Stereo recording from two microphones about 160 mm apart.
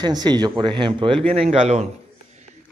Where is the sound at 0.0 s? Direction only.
25° right (ahead or behind).